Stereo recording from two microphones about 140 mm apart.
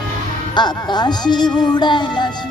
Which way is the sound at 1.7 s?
30° left (ahead or behind).